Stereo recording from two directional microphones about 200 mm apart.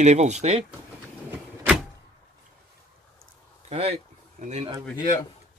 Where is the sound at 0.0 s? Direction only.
35° right (ahead or behind).